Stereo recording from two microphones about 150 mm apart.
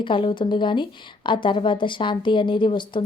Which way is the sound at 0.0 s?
35° left (ahead or behind).